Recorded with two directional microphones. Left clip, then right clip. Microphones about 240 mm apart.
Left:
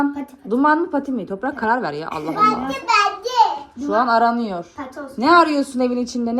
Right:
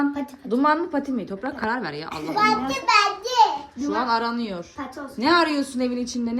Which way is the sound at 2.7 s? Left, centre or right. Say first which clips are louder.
Left 1 dB; right.